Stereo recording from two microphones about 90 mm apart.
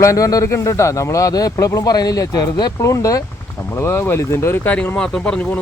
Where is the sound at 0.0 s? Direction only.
40° left (ahead or behind).